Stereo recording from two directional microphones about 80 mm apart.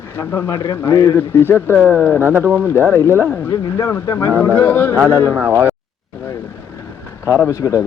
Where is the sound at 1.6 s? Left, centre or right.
Right.